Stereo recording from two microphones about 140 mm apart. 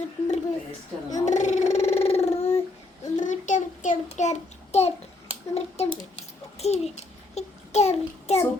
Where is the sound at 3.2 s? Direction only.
60° left (ahead or behind).